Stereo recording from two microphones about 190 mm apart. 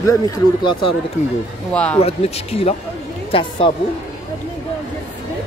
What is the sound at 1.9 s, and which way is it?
Speech, 35° left (ahead or behind).